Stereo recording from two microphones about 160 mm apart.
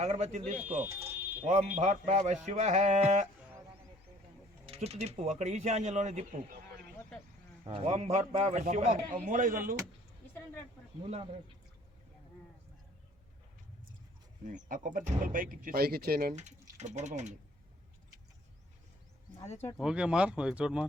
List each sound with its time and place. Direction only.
0.0 s a man's voice: 45° right (ahead or behind)
4.6 s a man's voice: 40° right (ahead or behind)
7.6 s a man's voice: 40° right (ahead or behind); by 9.7 s 60° right (ahead or behind)
11.0 s speech: 40° right (ahead or behind)
14.4 s speech: 55° right (ahead or behind); by 16.3 s 75° right (ahead or behind)
16.3 s a man's voice: 45° right (ahead or behind)
19.7 s speech: 5° right (ahead or behind)